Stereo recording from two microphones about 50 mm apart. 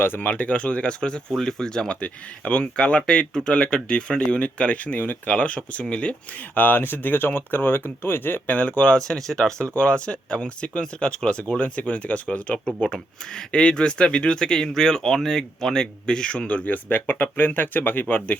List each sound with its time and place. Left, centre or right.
0.0 s speech: left
0.3 s speech: left
8.4 s speech: left
9.0 s speech: centre
9.7 s speech: left